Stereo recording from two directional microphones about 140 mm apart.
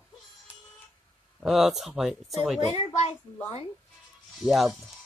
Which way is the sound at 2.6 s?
50° left (ahead or behind).